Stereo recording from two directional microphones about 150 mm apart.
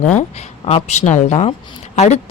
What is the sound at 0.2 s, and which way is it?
Speech, 45° left (ahead or behind).